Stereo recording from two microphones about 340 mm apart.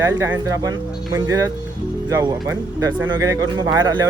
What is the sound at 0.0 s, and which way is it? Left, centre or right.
Speech, centre.